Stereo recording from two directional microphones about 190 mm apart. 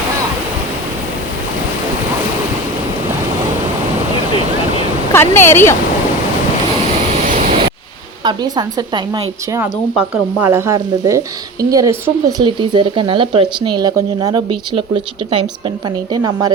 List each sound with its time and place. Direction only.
5.1 s speech: 10° left (ahead or behind)
8.2 s speech: 25° right (ahead or behind)
9.1 s frying: 15° right (ahead or behind)
12.5 s speech: 25° right (ahead or behind)